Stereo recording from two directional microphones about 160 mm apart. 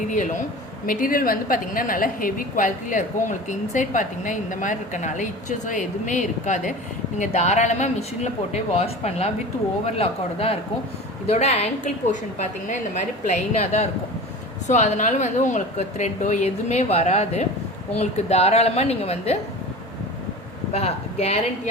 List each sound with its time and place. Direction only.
0.9 s a woman's voice: 60° left (ahead or behind); by 19.4 s 40° left (ahead or behind)
20.7 s a woman's voice: 40° left (ahead or behind)